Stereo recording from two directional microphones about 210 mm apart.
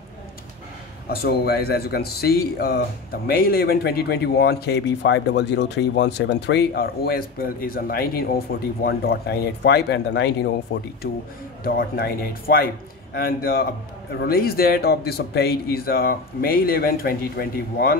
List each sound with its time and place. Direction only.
1.1 s speech: 50° left (ahead or behind)